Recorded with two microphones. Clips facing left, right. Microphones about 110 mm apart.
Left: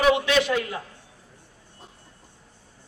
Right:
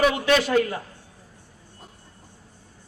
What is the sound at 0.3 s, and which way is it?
Speech, 45° right (ahead or behind).